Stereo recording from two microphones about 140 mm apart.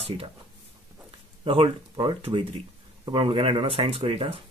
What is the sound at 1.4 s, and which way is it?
Speech, 40° right (ahead or behind).